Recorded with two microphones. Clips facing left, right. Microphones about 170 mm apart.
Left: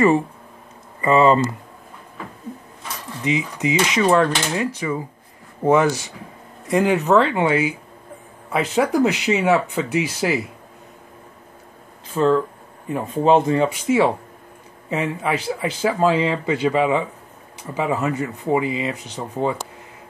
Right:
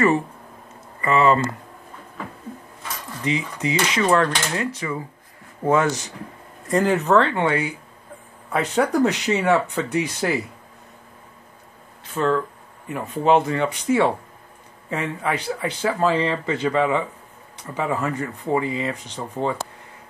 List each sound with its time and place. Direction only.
1.0 s speech: 25° left (ahead or behind)
3.3 s speech: 20° left (ahead or behind)
9.8 s speech: 90° left
12.1 s speech: 20° left (ahead or behind)
13.7 s speech: 15° left (ahead or behind)